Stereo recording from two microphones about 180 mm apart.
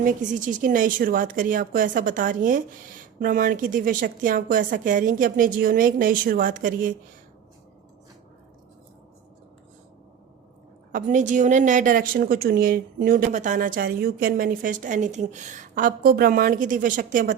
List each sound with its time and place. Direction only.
0.0 s a woman's voice: 45° right (ahead or behind)
10.9 s a woman's voice: 45° right (ahead or behind)